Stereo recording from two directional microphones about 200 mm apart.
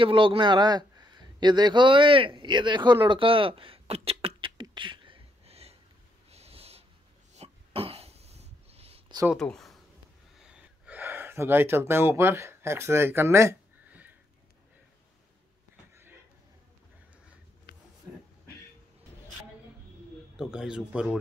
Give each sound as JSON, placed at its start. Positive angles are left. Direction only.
{"t": 0.0, "sound": "a man's voice", "side_deg": -25}
{"t": 6.3, "sound": "snort", "side_deg": -30}
{"t": 7.3, "sound": "cough", "side_deg": -30}
{"t": 9.3, "sound": "speech", "side_deg": 0}
{"t": 10.4, "sound": "gasp", "side_deg": -5}
{"t": 20.3, "sound": "speech", "side_deg": -5}